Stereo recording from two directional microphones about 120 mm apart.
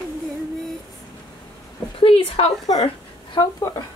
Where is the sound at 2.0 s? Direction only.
50° left (ahead or behind).